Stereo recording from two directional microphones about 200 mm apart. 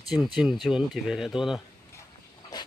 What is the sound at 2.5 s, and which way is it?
Dog, 20° left (ahead or behind).